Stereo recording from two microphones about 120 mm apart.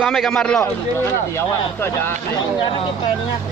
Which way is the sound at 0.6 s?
20° left (ahead or behind).